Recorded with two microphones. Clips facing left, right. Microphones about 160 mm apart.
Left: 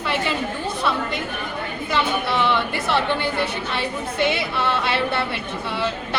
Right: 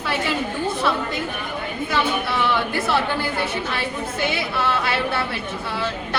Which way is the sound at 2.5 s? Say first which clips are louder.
Even; centre (ahead or behind).